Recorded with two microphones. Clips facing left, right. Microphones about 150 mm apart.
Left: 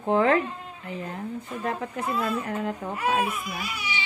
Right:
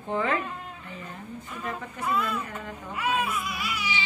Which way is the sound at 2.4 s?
75° left (ahead or behind).